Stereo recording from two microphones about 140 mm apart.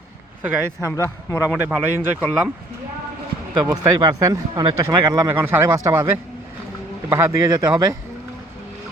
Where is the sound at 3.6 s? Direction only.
20° right (ahead or behind).